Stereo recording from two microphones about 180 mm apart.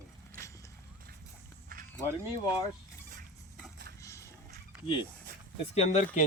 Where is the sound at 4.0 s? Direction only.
15° left (ahead or behind).